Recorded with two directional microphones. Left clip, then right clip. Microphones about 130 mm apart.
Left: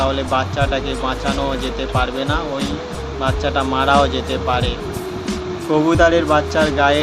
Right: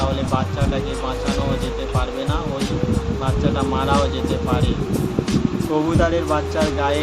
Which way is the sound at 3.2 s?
25° left (ahead or behind).